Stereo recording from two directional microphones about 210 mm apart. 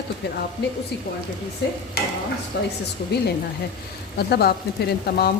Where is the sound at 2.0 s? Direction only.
50° left (ahead or behind).